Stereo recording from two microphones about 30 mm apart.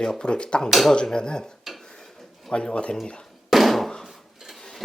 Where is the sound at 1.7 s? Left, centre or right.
Centre.